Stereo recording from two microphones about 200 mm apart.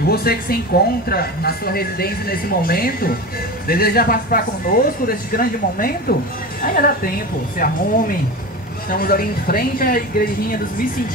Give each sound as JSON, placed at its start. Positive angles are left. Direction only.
{"t": 0.0, "sound": "speech", "side_deg": 50}